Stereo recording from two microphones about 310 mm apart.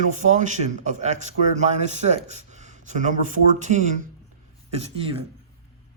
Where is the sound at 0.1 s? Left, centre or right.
Right.